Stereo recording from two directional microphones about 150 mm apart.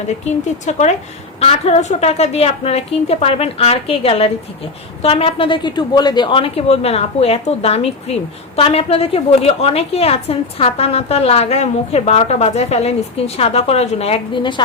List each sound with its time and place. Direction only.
0.3 s speech: 50° left (ahead or behind); by 14.6 s 30° left (ahead or behind)